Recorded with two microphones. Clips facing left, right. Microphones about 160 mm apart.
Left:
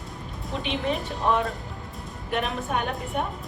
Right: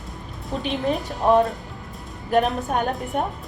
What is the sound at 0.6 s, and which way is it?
Speech, 40° right (ahead or behind).